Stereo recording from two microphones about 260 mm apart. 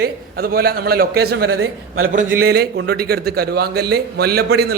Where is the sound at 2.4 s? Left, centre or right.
Right.